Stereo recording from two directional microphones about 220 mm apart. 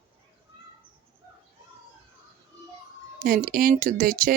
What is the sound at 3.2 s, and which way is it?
Speech, 40° right (ahead or behind).